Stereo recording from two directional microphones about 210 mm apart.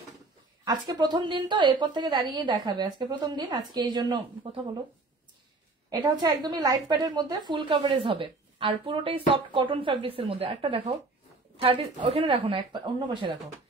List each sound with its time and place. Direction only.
0.7 s a woman's voice: 20° right (ahead or behind)
5.9 s a woman's voice: 20° right (ahead or behind)